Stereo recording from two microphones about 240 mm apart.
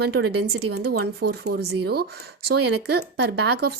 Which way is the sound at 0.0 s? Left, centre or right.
Right.